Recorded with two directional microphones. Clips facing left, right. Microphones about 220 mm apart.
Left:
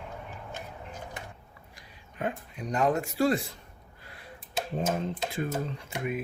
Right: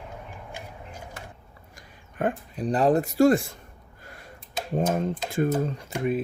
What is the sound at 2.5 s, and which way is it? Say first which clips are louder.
Speech: right 5 dB; 35° right (ahead or behind).